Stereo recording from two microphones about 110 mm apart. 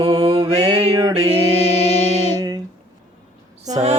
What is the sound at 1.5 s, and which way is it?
Music, 70° left (ahead or behind).